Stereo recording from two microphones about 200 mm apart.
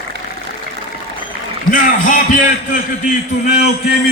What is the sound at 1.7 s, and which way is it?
A man's voice, 40° left (ahead or behind).